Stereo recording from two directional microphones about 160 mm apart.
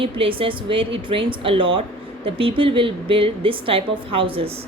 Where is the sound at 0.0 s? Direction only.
35° right (ahead or behind).